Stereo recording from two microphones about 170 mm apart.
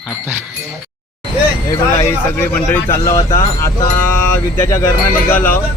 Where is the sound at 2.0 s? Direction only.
10° left (ahead or behind).